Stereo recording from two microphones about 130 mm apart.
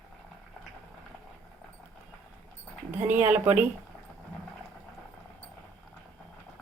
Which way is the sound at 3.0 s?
15° right (ahead or behind).